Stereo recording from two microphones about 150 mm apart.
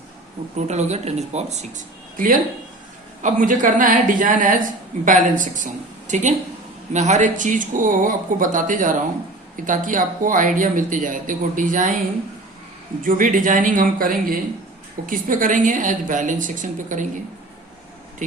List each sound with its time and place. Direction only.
0.7 s speech: 50° right (ahead or behind)
13.0 s speech: 65° right (ahead or behind)